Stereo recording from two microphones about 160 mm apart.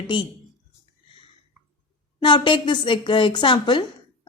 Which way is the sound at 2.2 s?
30° left (ahead or behind).